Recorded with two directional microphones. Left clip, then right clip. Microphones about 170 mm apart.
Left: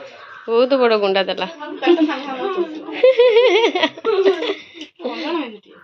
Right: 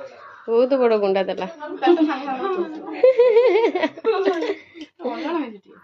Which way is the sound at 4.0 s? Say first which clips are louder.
Left 3 dB; 10° right (ahead or behind).